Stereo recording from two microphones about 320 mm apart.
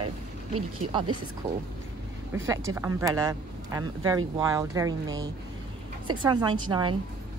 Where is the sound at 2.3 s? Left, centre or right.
Centre.